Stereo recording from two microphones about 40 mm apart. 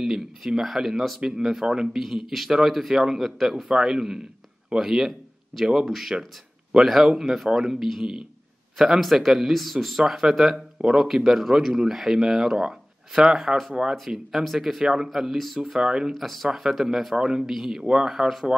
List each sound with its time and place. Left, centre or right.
0.0 s speech: centre
3.6 s a man's voice: centre
15.8 s speech: centre
16.2 s speech: centre
16.4 s speech: centre
17.6 s speech: centre